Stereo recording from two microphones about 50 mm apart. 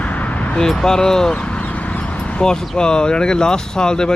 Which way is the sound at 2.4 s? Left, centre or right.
Centre.